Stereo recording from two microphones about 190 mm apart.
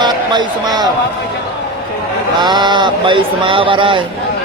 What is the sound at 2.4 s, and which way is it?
Speech, 25° right (ahead or behind).